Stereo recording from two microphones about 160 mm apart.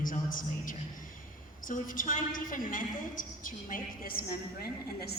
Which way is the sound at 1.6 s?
55° left (ahead or behind).